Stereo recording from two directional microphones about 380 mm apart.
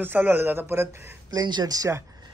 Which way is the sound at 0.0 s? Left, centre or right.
Centre.